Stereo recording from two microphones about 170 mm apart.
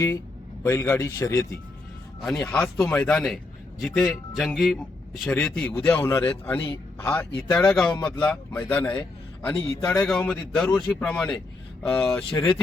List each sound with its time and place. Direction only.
0.6 s a man's voice: 15° left (ahead or behind)